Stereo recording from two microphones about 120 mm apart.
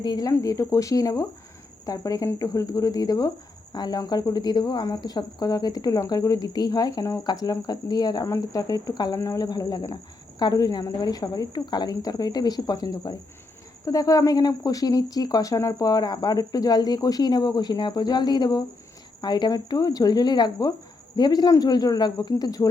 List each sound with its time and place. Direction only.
0.0 s speech: 35° left (ahead or behind)